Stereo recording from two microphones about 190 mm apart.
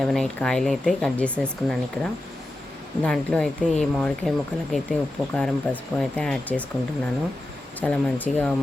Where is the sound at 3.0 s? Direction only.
5° left (ahead or behind).